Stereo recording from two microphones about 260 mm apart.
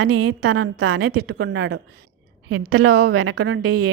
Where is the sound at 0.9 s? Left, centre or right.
Right.